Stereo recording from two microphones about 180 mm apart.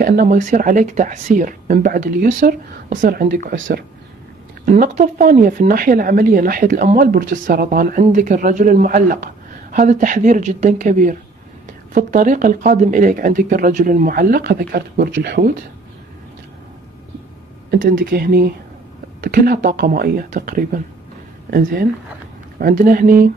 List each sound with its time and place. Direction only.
0.0 s speech: 50° right (ahead or behind)
17.6 s speech: 55° right (ahead or behind)